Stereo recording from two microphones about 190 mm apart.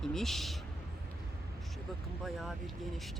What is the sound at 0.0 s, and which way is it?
Speech, centre (ahead or behind).